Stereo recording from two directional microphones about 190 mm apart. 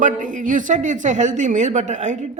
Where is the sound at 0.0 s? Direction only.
40° right (ahead or behind).